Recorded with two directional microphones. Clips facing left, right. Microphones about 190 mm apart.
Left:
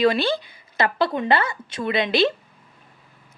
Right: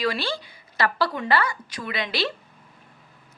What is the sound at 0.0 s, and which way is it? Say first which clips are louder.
A woman's voice: left 7 dB; 20° left (ahead or behind).